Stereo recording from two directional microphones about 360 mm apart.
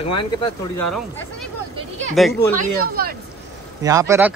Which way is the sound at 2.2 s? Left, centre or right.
Centre.